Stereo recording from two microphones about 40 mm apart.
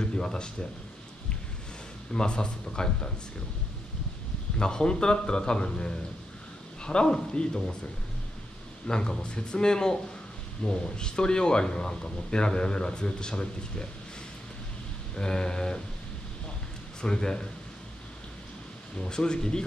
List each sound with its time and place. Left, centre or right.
0.0 s speech: centre
2.1 s speech: left
4.6 s speech: left
8.8 s speech: centre
15.1 s speech: centre
17.0 s speech: centre
18.9 s speech: left